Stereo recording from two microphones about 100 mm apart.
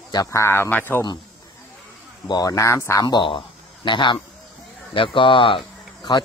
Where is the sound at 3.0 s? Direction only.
50° left (ahead or behind).